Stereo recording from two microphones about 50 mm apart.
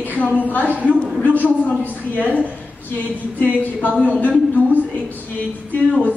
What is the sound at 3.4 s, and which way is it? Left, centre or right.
Speech, left.